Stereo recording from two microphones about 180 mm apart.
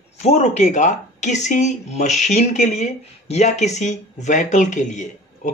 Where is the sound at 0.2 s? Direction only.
40° left (ahead or behind).